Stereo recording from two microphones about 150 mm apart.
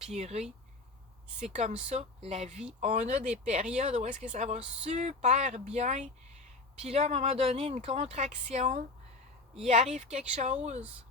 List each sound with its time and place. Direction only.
0.1 s speech: 45° right (ahead or behind)
1.5 s speech: 45° right (ahead or behind)